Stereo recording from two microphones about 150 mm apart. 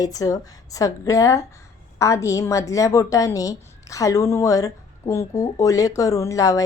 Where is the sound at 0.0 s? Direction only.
25° left (ahead or behind).